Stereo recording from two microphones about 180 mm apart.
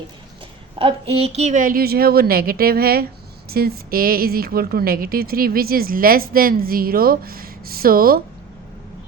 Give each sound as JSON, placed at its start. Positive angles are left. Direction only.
{"t": 0.8, "sound": "a woman's voice", "side_deg": -30}